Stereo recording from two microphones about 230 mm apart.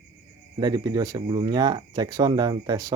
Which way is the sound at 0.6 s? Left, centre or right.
Centre.